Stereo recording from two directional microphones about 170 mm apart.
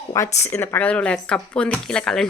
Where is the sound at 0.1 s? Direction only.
20° left (ahead or behind).